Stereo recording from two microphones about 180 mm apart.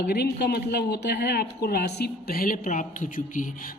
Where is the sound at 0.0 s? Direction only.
65° left (ahead or behind).